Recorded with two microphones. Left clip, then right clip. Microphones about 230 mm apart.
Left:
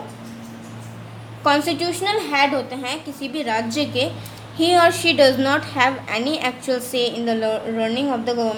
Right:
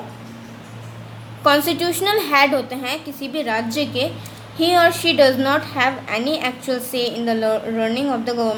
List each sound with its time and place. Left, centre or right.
1.5 s a woman's voice: centre